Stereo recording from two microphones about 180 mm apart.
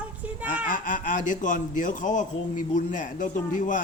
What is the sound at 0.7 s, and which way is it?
A man's voice, 45° left (ahead or behind).